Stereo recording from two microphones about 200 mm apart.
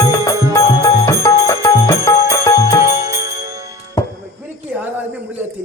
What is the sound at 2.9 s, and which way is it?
Jingle bell, 15° right (ahead or behind).